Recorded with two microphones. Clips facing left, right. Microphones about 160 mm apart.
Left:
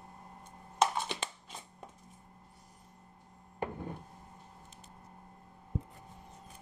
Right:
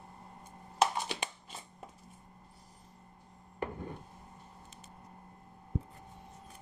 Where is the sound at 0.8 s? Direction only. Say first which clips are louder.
Even; 5° right (ahead or behind).